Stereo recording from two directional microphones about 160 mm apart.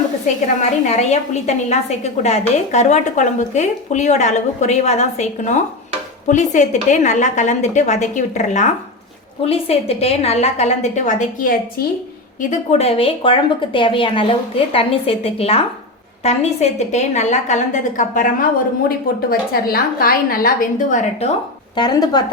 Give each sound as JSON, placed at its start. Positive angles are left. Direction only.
{"t": 0.4, "sound": "a woman's voice", "side_deg": 45}
{"t": 18.9, "sound": "a woman's voice", "side_deg": 70}
{"t": 21.8, "sound": "speech", "side_deg": 25}